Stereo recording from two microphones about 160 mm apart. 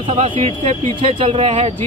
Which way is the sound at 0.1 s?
45° right (ahead or behind).